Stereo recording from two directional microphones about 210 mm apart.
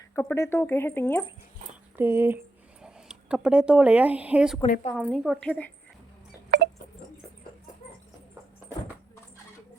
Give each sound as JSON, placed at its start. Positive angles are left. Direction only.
{"t": 0.2, "sound": "speech", "side_deg": 10}
{"t": 2.0, "sound": "speech", "side_deg": -10}
{"t": 4.6, "sound": "a woman's voice", "side_deg": 30}
{"t": 4.9, "sound": "a woman's voice", "side_deg": -5}
{"t": 6.5, "sound": "a sound", "side_deg": -50}